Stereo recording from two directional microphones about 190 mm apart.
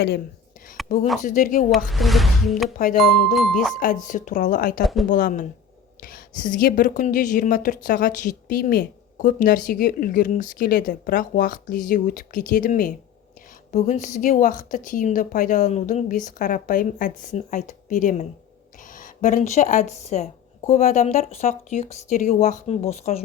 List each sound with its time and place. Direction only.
1.2 s a woman's voice: 45° left (ahead or behind)
1.7 s speech: centre (ahead or behind)
2.7 s a woman's voice: 45° left (ahead or behind)
3.3 s speech: centre (ahead or behind)
4.0 s a woman's voice: 45° left (ahead or behind)